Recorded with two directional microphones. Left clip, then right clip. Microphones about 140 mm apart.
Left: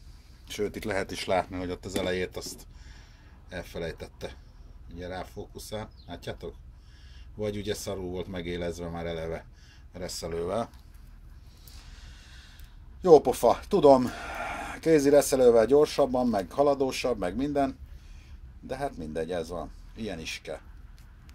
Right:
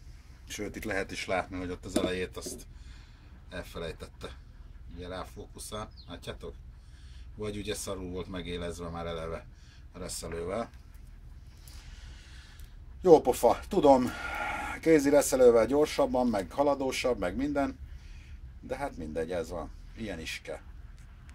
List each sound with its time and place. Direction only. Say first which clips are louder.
0.5 s speech: left 5 dB; 45° left (ahead or behind)
3.4 s speech: left 3 dB; 35° left (ahead or behind)
13.0 s speech: left 2 dB; 40° left (ahead or behind)